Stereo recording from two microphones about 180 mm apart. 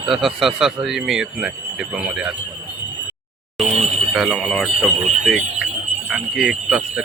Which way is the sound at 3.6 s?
35° right (ahead or behind).